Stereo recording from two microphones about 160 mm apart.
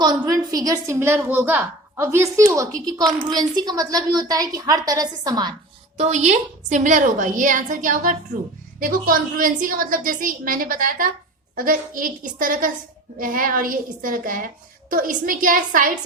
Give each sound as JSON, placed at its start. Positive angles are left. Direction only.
{"t": 0.0, "sound": "a woman's voice", "side_deg": -25}
{"t": 6.0, "sound": "a woman's voice", "side_deg": -45}